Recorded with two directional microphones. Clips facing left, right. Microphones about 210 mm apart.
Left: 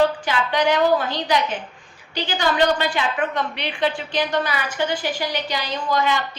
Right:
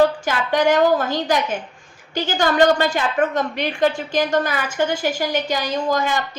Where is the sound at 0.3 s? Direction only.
45° right (ahead or behind).